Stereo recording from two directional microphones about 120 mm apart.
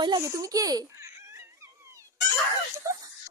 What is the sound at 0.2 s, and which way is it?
Speech, 25° right (ahead or behind).